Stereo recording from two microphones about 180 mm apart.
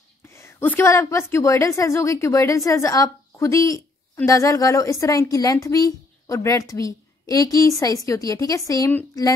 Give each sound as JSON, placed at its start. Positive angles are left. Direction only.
{"t": 0.3, "sound": "a woman's voice", "side_deg": 15}